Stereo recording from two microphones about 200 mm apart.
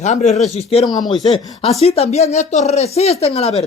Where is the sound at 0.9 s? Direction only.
20° left (ahead or behind).